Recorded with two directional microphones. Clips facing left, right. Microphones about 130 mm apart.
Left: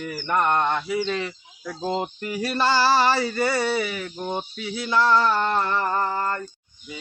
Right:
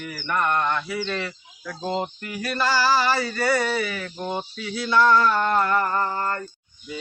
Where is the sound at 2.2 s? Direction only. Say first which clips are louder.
Left 2 dB; 25° left (ahead or behind).